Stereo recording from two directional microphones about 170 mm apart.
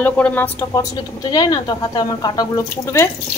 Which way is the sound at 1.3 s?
25° left (ahead or behind).